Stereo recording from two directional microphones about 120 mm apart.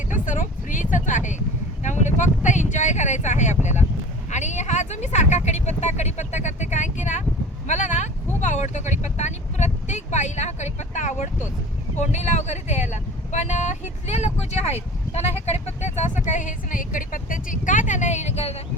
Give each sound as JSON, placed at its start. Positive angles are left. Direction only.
{"t": 0.1, "sound": "vehicle", "side_deg": 90}
{"t": 1.8, "sound": "a sound", "side_deg": 90}
{"t": 4.3, "sound": "speech", "side_deg": 75}
{"t": 8.4, "sound": "vehicle", "side_deg": 80}
{"t": 11.9, "sound": "speech", "side_deg": 75}
{"t": 17.5, "sound": "a sound", "side_deg": 90}